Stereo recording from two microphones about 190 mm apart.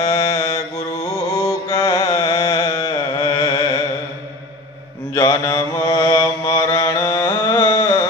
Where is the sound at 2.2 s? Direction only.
15° left (ahead or behind).